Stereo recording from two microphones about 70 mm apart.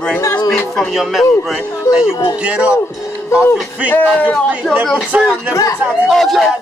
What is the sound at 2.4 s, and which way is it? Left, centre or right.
Speech, centre.